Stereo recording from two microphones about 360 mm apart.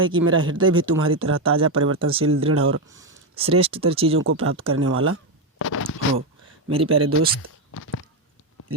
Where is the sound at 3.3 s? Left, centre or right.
Centre.